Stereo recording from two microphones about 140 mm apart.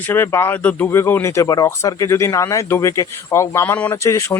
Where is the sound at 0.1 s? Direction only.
15° left (ahead or behind).